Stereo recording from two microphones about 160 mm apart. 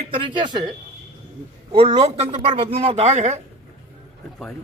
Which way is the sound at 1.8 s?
40° right (ahead or behind).